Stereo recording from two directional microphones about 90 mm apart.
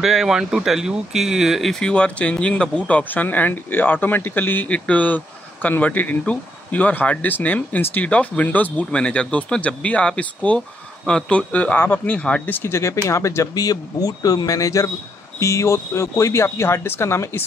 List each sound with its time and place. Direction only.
0.0 s speech: 5° right (ahead or behind); by 17.4 s 30° left (ahead or behind)